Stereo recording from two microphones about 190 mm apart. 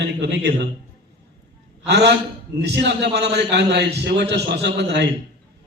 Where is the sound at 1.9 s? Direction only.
65° right (ahead or behind).